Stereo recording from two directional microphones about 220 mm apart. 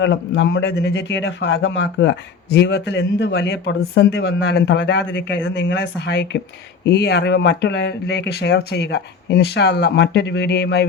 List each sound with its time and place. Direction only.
0.0 s a man's voice: 55° left (ahead or behind)